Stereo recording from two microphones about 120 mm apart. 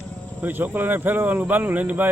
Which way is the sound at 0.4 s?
15° right (ahead or behind).